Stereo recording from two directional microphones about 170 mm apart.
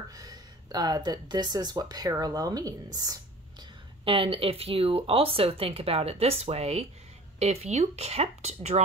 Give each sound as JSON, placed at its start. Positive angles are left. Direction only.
{"t": 0.1, "sound": "speech", "side_deg": -20}
{"t": 4.0, "sound": "speech", "side_deg": -30}